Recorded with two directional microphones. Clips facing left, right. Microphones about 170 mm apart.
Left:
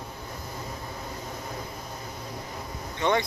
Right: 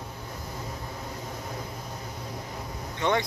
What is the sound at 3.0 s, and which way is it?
Speech, centre (ahead or behind).